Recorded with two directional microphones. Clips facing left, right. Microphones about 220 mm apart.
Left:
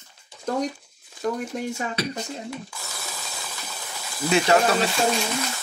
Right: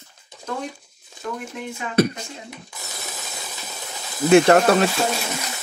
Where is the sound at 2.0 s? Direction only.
50° right (ahead or behind).